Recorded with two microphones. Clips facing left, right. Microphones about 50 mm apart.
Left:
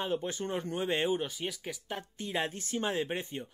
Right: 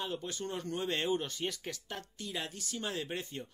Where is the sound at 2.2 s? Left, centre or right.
Left.